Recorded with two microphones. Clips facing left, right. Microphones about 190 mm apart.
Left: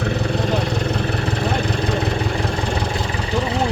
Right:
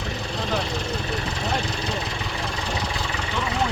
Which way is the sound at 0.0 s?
65° left (ahead or behind).